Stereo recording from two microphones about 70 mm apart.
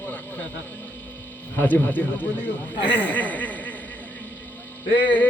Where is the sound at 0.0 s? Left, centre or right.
Left.